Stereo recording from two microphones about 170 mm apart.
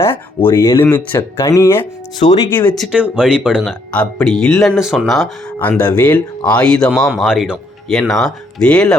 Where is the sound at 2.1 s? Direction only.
25° left (ahead or behind).